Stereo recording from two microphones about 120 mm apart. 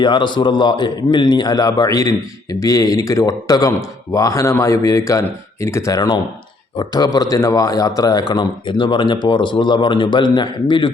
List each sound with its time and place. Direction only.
0.0 s a man's voice: 40° left (ahead or behind)